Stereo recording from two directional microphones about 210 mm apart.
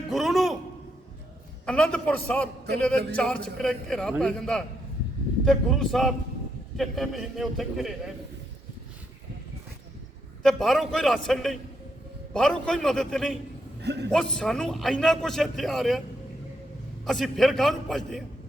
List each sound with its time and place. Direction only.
0.1 s a sound: centre (ahead or behind)
1.6 s a man's voice: 5° left (ahead or behind)
10.4 s a man's voice: centre (ahead or behind)
13.8 s a man's voice: 55° right (ahead or behind)
14.1 s a man's voice: 5° left (ahead or behind)
17.1 s a man's voice: centre (ahead or behind)